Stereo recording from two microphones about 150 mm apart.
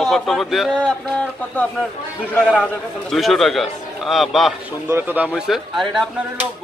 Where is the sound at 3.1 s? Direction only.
Centre (ahead or behind).